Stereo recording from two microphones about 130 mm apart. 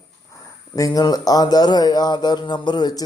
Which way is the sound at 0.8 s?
30° left (ahead or behind).